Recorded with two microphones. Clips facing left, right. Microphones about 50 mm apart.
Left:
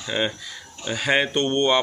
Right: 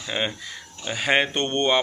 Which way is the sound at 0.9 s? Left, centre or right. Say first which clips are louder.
Left 1 dB; right.